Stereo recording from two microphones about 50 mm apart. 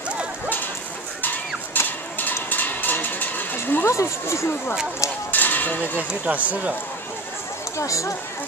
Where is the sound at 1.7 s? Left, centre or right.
Left.